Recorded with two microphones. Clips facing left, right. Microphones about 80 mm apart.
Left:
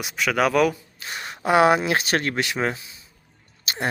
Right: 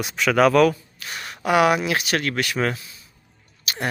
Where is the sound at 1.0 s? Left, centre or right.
Left.